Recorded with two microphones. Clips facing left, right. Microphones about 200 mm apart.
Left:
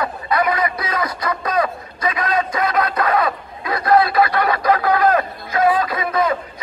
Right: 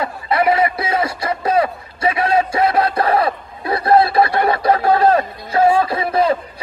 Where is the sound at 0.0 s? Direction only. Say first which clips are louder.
Right 2 dB; 25° right (ahead or behind).